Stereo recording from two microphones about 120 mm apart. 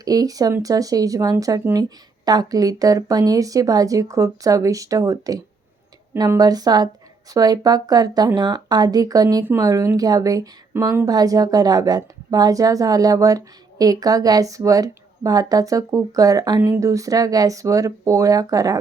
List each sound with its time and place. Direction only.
0.0 s a woman's voice: 30° right (ahead or behind)
9.4 s a woman's voice: 20° right (ahead or behind)